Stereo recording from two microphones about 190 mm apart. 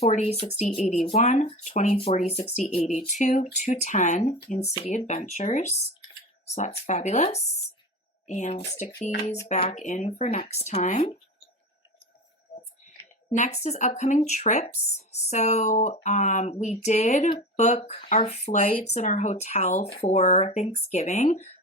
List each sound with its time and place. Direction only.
0.0 s speech: 35° left (ahead or behind)
12.5 s a sound: 35° left (ahead or behind)
13.0 s speech: 40° left (ahead or behind)